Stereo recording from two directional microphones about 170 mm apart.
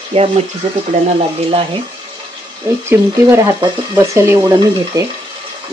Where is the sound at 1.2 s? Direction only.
35° right (ahead or behind).